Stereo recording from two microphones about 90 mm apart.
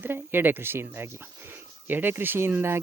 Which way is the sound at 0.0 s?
25° right (ahead or behind).